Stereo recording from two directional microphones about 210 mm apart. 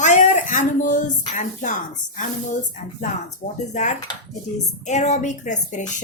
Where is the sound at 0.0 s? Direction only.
35° left (ahead or behind).